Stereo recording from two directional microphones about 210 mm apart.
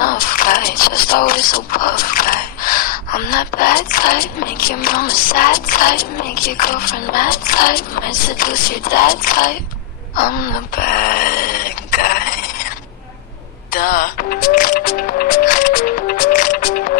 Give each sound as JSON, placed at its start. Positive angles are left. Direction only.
{"t": 0.0, "sound": "speech", "side_deg": 40}
{"t": 10.1, "sound": "a sound", "side_deg": 40}
{"t": 13.7, "sound": "music", "side_deg": 45}